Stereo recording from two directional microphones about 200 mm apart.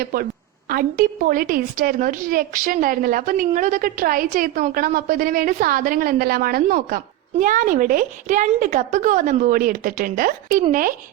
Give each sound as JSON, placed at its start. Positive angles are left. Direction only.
{"t": 0.0, "sound": "a woman's voice", "side_deg": -45}